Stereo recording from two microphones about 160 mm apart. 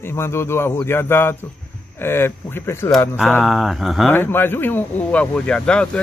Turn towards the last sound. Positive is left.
turn(degrees=5)  # may be behind; listen again after turning